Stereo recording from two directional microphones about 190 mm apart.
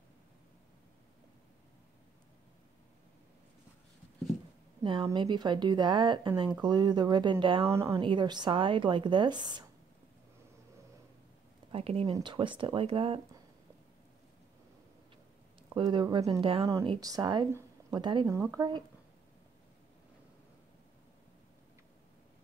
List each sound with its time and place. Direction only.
4.8 s speech: 25° right (ahead or behind)
7.7 s speech: 15° right (ahead or behind)
11.7 s speech: 30° right (ahead or behind)
15.7 s speech: 25° right (ahead or behind)
16.6 s speech: 15° right (ahead or behind)